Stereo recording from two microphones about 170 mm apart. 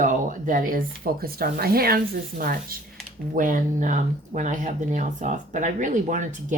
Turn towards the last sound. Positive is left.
turn(degrees=-50)  # may be behind; listen again after turning